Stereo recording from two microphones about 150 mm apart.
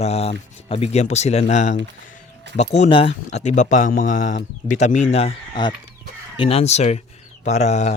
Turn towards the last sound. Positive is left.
turn(degrees=50)  # may be behind; listen again after turning